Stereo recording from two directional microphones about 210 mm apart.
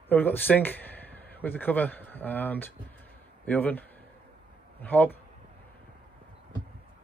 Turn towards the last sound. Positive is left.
turn(degrees=10)  # may be behind; listen again after turning